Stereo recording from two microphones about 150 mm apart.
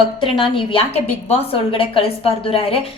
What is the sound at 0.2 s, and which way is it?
A woman's voice, 35° left (ahead or behind).